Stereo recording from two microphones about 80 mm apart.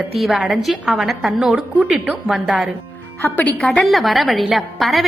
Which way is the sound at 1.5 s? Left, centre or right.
Centre.